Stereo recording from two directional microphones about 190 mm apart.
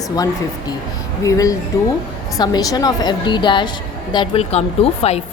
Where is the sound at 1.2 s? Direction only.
15° left (ahead or behind).